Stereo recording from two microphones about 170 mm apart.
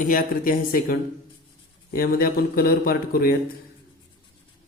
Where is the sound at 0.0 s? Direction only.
55° left (ahead or behind).